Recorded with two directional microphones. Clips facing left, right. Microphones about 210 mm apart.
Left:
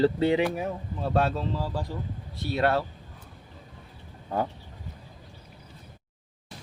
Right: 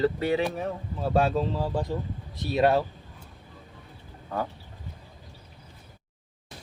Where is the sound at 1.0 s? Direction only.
10° right (ahead or behind).